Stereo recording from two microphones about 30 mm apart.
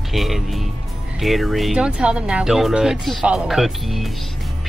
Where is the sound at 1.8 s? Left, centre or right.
Right.